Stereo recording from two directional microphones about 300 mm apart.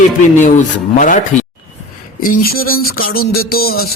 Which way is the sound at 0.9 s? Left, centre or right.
Left.